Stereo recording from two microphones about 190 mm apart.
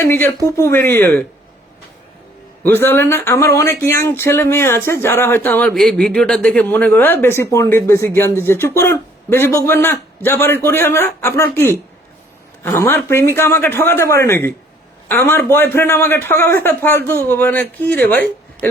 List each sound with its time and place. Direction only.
0.0 s speech: 15° left (ahead or behind)
2.6 s speech: 10° left (ahead or behind)